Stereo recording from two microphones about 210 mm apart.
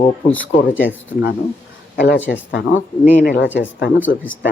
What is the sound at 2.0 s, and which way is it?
Speech, 55° left (ahead or behind).